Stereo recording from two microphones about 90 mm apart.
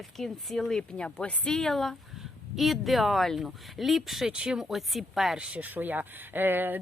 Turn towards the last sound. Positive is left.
turn(degrees=-20)  # may be behind; listen again after turning